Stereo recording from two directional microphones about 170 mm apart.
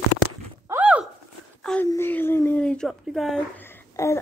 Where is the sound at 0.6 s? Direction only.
10° right (ahead or behind).